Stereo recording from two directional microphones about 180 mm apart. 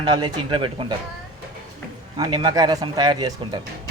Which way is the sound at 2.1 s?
25° right (ahead or behind).